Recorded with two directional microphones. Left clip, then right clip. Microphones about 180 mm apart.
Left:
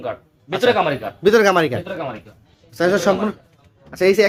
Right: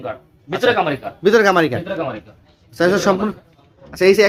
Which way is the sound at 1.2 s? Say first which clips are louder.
Right 1 dB; 10° left (ahead or behind).